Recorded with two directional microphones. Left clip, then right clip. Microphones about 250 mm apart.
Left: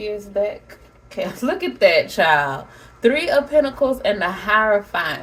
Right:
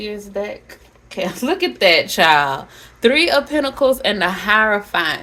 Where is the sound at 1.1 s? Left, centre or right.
Right.